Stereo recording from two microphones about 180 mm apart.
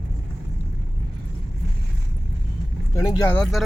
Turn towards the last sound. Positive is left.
turn(degrees=0)  # may be behind; listen again after turning